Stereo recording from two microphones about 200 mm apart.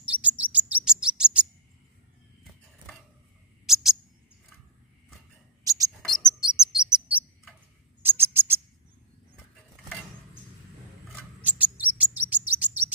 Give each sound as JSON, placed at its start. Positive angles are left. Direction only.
{"t": 0.0, "sound": "chirp", "side_deg": -5}
{"t": 3.6, "sound": "a sound", "side_deg": 0}
{"t": 5.6, "sound": "mouse", "side_deg": -15}
{"t": 6.2, "sound": "chirp", "side_deg": -5}
{"t": 8.0, "sound": "a sound", "side_deg": -10}
{"t": 11.4, "sound": "chirp", "side_deg": -10}